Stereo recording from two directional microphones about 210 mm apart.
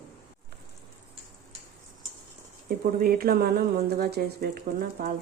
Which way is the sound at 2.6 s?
45° right (ahead or behind).